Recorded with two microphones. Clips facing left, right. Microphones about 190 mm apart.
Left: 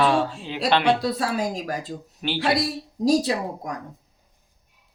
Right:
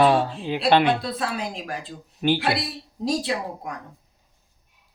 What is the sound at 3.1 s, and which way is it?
Speech, 40° left (ahead or behind).